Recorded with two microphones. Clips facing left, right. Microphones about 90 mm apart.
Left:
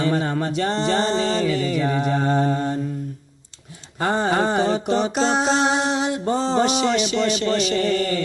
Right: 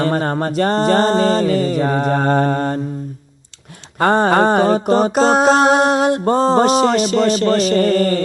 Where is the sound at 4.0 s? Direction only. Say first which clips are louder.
Right 7 dB; 60° right (ahead or behind); by 8.2 s 45° right (ahead or behind).